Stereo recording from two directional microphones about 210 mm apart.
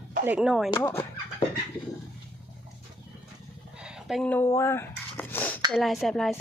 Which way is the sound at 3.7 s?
5° right (ahead or behind).